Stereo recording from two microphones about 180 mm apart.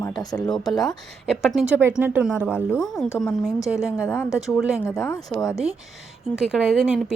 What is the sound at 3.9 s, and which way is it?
Speech, 15° left (ahead or behind).